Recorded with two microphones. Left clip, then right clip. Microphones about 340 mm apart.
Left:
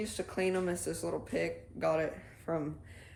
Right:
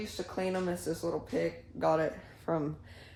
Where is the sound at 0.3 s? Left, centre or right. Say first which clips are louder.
Left 1 dB; centre.